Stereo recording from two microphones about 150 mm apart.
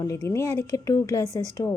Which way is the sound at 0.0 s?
20° left (ahead or behind).